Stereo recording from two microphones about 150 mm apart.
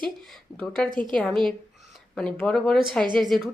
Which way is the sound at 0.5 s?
5° left (ahead or behind).